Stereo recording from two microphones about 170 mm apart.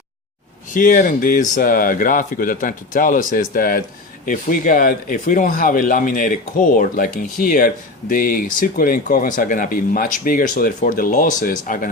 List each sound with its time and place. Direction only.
0.7 s speech: 50° left (ahead or behind)